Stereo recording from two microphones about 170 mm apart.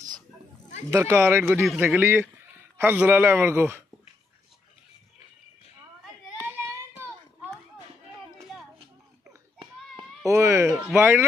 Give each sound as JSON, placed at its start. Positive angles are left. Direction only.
{"t": 0.8, "sound": "speech", "side_deg": -15}
{"t": 1.6, "sound": "speech", "side_deg": -5}
{"t": 6.6, "sound": "child singing", "side_deg": -15}
{"t": 8.4, "sound": "a sound", "side_deg": 0}
{"t": 9.6, "sound": "a sound", "side_deg": -25}
{"t": 10.3, "sound": "speech", "side_deg": -15}